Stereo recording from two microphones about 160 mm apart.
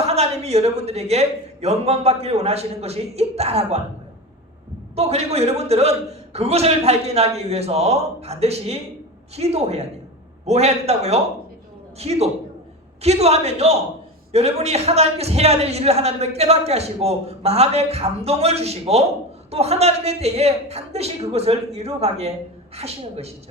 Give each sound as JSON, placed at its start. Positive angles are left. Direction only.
{"t": 0.1, "sound": "a woman's voice", "side_deg": -40}
{"t": 4.9, "sound": "a man's voice", "side_deg": -40}